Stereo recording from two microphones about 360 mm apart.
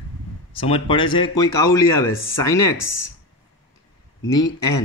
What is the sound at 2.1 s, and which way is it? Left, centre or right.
Speech, left.